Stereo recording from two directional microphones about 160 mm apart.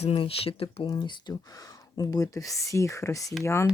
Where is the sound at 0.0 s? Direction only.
35° left (ahead or behind).